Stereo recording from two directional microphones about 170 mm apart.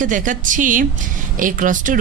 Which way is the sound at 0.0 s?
50° right (ahead or behind).